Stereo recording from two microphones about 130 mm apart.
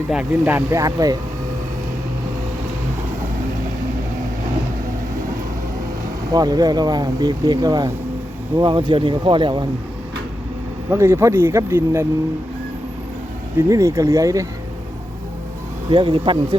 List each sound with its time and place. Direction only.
0.1 s speech: 10° right (ahead or behind); by 1.2 s 30° right (ahead or behind)
6.3 s speech: 30° right (ahead or behind)
10.8 s speech: 20° right (ahead or behind)
13.6 s speech: 25° right (ahead or behind)
15.9 s speech: 35° right (ahead or behind)